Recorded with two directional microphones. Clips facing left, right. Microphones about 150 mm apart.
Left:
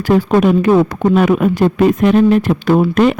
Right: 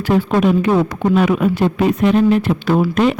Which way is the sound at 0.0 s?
45° left (ahead or behind).